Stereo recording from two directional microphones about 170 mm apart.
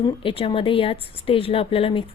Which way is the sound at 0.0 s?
30° left (ahead or behind).